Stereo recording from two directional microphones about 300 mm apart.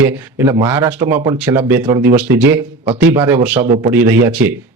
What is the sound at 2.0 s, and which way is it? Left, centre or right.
Speech, right.